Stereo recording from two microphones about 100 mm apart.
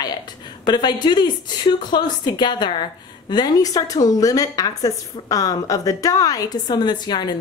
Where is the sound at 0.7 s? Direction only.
45° left (ahead or behind).